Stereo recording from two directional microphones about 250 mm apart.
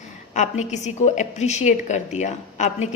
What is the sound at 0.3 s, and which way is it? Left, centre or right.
A woman's voice, left.